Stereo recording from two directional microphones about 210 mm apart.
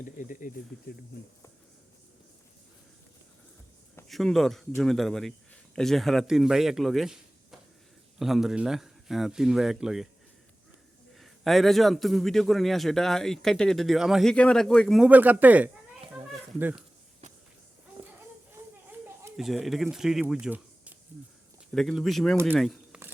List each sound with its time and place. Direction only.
0.0 s speech: 40° left (ahead or behind)
4.1 s a man's voice: centre (ahead or behind)
11.1 s a man's voice: centre (ahead or behind)
16.1 s children playing: 10° right (ahead or behind)
18.5 s children playing: 10° right (ahead or behind)
21.7 s a man's voice: centre (ahead or behind)